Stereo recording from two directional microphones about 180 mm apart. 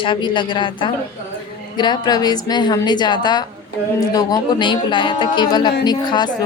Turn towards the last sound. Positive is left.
turn(degrees=25)  # may be behind; listen again after turning